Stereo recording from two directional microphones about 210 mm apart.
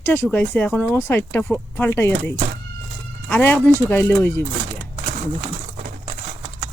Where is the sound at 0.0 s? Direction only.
10° left (ahead or behind).